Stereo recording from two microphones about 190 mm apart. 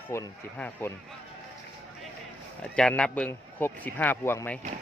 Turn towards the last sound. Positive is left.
turn(degrees=10)  # may be behind; listen again after turning